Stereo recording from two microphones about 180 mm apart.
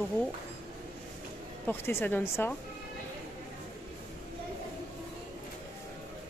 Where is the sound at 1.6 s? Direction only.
10° left (ahead or behind).